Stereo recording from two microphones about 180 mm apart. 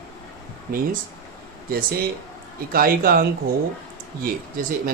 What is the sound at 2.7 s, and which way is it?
Speech, 55° right (ahead or behind).